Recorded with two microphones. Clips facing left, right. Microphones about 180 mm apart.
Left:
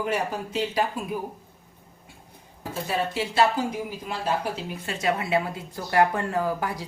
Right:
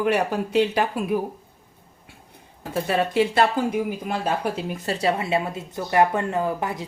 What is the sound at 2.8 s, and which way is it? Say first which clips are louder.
Speech: right 6 dB; 60° right (ahead or behind).